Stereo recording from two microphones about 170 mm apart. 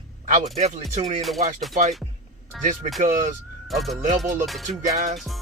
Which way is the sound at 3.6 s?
Centre (ahead or behind).